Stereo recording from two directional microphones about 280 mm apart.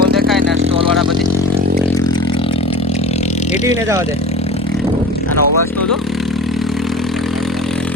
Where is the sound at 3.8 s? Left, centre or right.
Centre.